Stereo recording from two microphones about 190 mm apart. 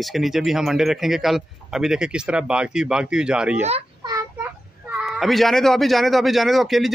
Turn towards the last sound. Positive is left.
turn(degrees=0)  # may be behind; listen again after turning